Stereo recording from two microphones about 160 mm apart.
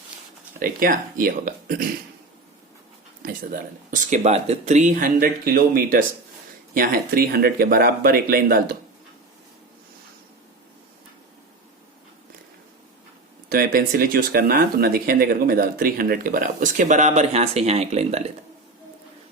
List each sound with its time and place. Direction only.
0.6 s speech: 65° right (ahead or behind)
3.2 s speech: 55° right (ahead or behind)
13.5 s speech: 70° right (ahead or behind); by 18.2 s 40° right (ahead or behind)